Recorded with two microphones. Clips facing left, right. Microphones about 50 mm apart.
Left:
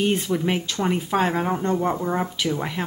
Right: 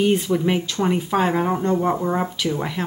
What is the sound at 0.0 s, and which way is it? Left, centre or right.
Speech, centre.